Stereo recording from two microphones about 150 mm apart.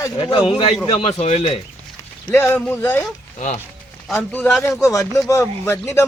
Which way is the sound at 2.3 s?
15° left (ahead or behind).